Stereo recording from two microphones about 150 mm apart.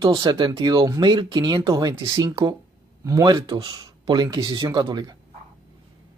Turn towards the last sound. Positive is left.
turn(degrees=-30)  # may be behind; listen again after turning